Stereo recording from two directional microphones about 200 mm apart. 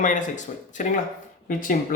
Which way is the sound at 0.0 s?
40° left (ahead or behind).